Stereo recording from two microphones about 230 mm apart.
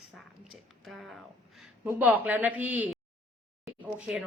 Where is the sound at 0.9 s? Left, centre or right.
Centre.